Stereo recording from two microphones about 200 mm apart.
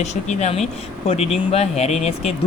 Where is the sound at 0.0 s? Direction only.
35° left (ahead or behind).